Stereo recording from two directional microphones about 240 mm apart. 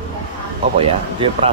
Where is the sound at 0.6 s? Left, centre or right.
Right.